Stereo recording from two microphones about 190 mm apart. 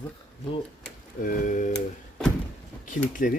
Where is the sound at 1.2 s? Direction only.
45° left (ahead or behind).